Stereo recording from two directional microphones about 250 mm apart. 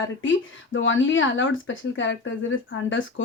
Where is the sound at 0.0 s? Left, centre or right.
Left.